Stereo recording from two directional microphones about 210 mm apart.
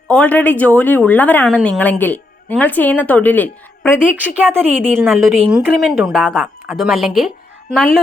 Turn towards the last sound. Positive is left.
turn(degrees=0)  # may be behind; listen again after turning